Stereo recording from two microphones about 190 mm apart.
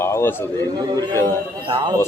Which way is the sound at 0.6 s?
20° right (ahead or behind).